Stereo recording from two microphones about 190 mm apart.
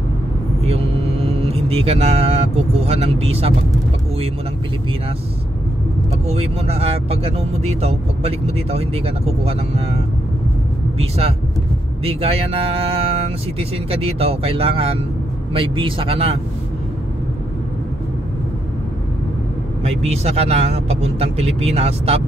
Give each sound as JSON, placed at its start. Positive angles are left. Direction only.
{"t": 0.7, "sound": "speech", "side_deg": -30}
{"t": 6.2, "sound": "speech", "side_deg": -30}
{"t": 19.8, "sound": "speech", "side_deg": -35}